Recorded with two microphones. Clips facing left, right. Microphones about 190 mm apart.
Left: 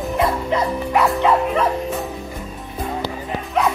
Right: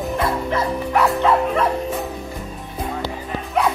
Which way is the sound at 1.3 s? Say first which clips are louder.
Even; centre (ahead or behind).